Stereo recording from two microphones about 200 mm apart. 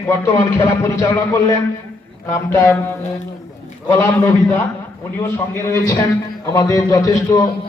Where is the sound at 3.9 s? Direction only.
15° left (ahead or behind).